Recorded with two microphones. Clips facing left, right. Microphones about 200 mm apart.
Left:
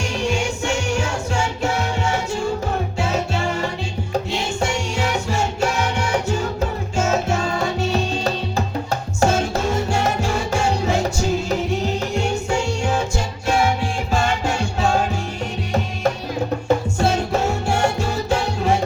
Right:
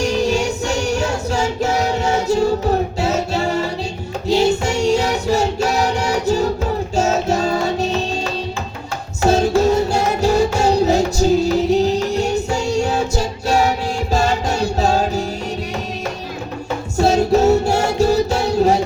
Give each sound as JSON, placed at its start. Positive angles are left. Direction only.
{"t": 0.0, "sound": "music", "side_deg": -40}
{"t": 9.2, "sound": "music", "side_deg": -40}
{"t": 17.0, "sound": "music", "side_deg": -40}